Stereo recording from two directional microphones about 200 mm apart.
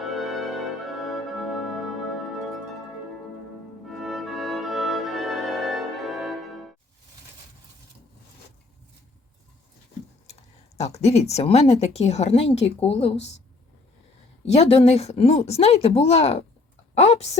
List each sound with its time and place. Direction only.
0.0 s music: centre (ahead or behind)
3.8 s music: centre (ahead or behind)
10.8 s speech: 35° left (ahead or behind)
14.4 s speech: 35° left (ahead or behind)
16.9 s a sound: 30° left (ahead or behind)